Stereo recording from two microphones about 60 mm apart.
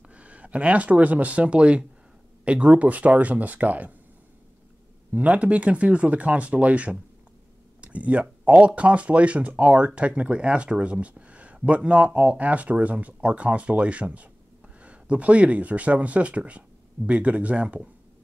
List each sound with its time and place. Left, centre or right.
0.1 s speech: right
5.1 s speech: right